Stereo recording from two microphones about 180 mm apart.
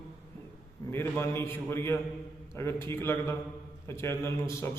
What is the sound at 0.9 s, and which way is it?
A man's voice, 15° left (ahead or behind).